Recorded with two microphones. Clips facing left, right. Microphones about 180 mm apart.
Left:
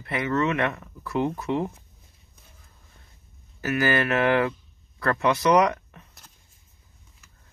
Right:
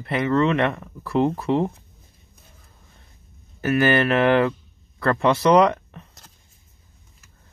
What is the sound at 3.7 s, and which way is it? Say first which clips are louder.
Speech: right 5 dB; 30° right (ahead or behind).